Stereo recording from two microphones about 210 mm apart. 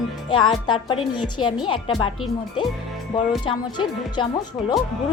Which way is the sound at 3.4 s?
20° left (ahead or behind).